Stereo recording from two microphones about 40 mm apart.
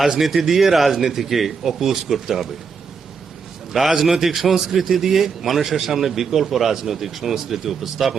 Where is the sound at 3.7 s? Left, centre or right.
Centre.